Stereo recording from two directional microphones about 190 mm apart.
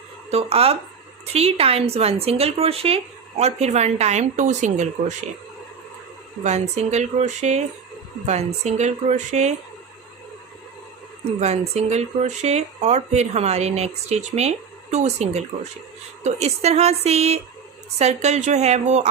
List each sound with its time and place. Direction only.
0.3 s speech: 30° right (ahead or behind)
6.4 s speech: 35° right (ahead or behind)
11.3 s speech: 35° right (ahead or behind)